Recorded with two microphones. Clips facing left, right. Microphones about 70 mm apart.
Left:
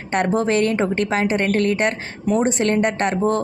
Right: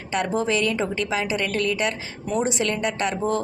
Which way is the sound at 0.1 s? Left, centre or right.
Left.